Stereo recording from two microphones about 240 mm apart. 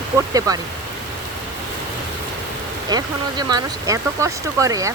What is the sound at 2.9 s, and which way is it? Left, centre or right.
Speech, centre.